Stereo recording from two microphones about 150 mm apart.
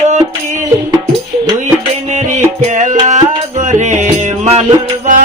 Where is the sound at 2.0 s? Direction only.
50° right (ahead or behind).